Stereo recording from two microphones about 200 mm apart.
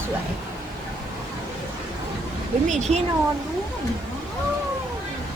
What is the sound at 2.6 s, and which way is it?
Speech, 35° right (ahead or behind).